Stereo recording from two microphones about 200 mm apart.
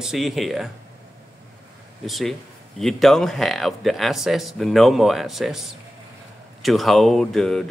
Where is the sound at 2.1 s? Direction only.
Centre (ahead or behind).